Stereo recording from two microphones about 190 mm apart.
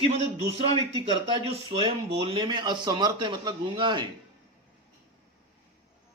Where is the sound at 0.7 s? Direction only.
30° right (ahead or behind).